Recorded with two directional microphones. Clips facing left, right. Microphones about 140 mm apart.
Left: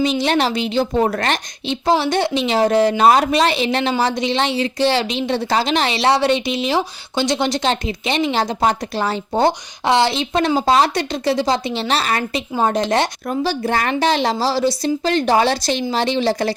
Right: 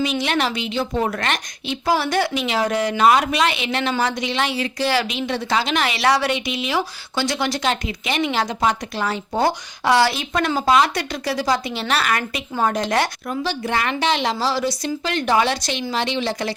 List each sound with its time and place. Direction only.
0.0 s a woman's voice: 30° left (ahead or behind)
13.2 s a woman's voice: 40° left (ahead or behind)